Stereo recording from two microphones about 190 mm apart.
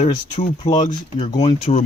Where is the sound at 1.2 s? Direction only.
25° left (ahead or behind).